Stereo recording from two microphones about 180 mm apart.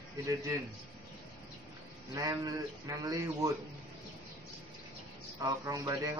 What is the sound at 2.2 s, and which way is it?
Speech, 20° right (ahead or behind).